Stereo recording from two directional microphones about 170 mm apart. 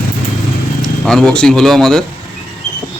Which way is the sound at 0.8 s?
5° left (ahead or behind).